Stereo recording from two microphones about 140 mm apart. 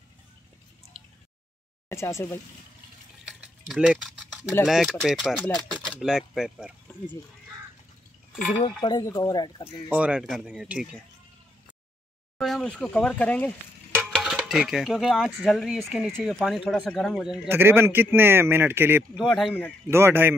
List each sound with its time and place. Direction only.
1.0 s drip: centre (ahead or behind)
1.9 s speech: 20° left (ahead or behind)
3.3 s a sound: 5° right (ahead or behind)
4.6 s speech: centre (ahead or behind)
8.8 s speech: 30° left (ahead or behind)
9.8 s a man's voice: 10° right (ahead or behind)
12.4 s speech: centre (ahead or behind)
14.1 s speech: 5° right (ahead or behind)
17.5 s a man's voice: 15° right (ahead or behind)
19.1 s speech: centre (ahead or behind)
19.9 s a man's voice: 15° right (ahead or behind)